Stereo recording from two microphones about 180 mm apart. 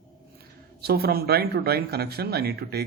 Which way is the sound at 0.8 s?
60° right (ahead or behind).